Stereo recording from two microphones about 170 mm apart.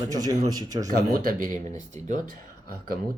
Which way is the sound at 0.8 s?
55° right (ahead or behind).